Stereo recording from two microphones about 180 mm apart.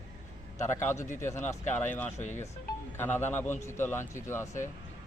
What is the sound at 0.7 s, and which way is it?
Speech, 15° left (ahead or behind).